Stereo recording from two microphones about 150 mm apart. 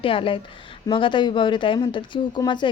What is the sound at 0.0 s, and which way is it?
A woman's voice, 35° left (ahead or behind).